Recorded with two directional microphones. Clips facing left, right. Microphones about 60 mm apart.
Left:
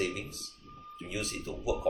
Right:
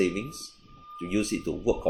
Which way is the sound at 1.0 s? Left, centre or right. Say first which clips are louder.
Right 10 dB; right.